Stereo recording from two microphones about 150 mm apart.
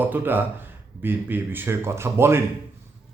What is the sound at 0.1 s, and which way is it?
Speech, 15° right (ahead or behind).